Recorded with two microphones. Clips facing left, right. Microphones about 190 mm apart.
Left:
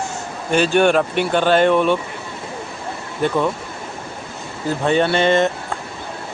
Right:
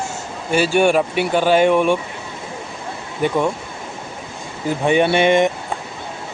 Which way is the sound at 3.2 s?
15° right (ahead or behind).